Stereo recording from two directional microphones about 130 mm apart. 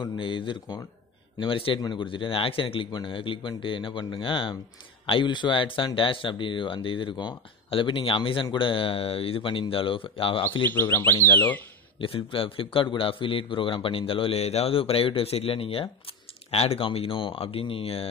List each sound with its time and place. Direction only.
0.0 s speech: 40° left (ahead or behind)
10.6 s speech: 15° left (ahead or behind)
12.0 s a man's voice: 45° left (ahead or behind)